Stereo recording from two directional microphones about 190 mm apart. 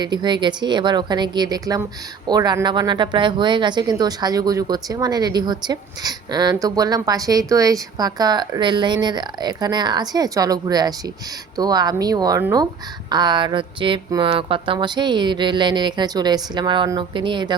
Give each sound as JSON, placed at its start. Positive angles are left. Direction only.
{"t": 0.0, "sound": "speech", "side_deg": -25}